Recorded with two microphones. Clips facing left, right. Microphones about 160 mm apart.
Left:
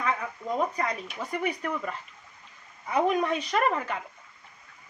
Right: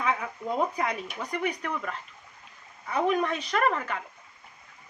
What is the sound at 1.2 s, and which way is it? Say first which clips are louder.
Speech: left 1 dB; 5° left (ahead or behind).